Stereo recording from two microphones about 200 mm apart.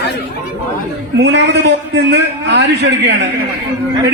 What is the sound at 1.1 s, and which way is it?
A man's voice, 60° right (ahead or behind).